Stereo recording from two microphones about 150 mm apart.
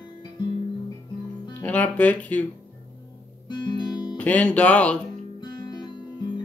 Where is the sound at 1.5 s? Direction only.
10° left (ahead or behind).